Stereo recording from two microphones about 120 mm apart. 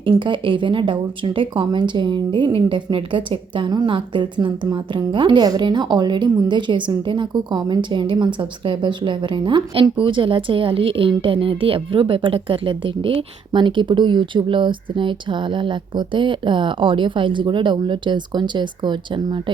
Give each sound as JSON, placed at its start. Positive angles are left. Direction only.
{"t": 0.2, "sound": "speech", "side_deg": -45}